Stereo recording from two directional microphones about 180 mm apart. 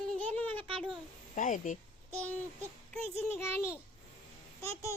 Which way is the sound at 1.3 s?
45° left (ahead or behind).